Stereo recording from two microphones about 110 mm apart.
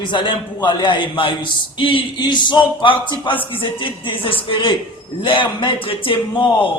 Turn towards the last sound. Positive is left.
turn(degrees=55)  # may be behind; listen again after turning